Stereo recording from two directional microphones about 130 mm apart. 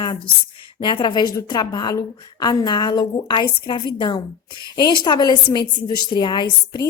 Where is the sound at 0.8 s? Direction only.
35° left (ahead or behind).